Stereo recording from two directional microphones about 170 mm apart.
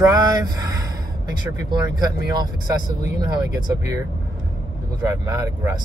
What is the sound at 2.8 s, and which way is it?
Speech, 45° left (ahead or behind).